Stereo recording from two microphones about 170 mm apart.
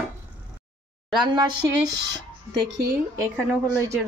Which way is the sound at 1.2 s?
30° right (ahead or behind).